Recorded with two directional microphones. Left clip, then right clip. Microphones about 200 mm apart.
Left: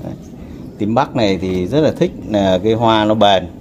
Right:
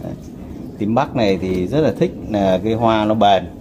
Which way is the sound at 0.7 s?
40° left (ahead or behind).